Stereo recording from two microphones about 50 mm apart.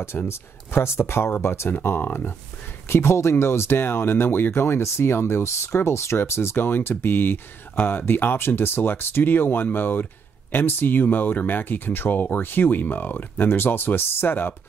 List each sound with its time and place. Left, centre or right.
0.3 s speech: left
1.7 s speech: left
2.9 s speech: left